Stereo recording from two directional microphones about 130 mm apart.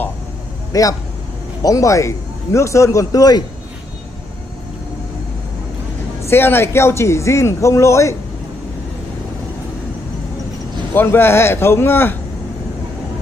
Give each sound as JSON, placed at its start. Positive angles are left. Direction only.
{"t": 0.7, "sound": "a man's voice", "side_deg": 25}
{"t": 6.2, "sound": "a man's voice", "side_deg": 15}
{"t": 10.9, "sound": "a man's voice", "side_deg": 15}